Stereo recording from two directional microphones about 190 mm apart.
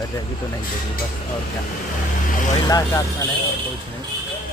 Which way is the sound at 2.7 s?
20° left (ahead or behind).